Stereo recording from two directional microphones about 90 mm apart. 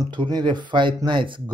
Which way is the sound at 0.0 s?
55° right (ahead or behind).